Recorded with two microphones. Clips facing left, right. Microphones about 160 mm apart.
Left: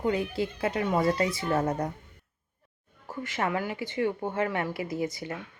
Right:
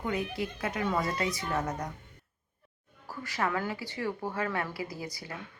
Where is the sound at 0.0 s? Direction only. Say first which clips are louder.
Left 5 dB; 25° left (ahead or behind).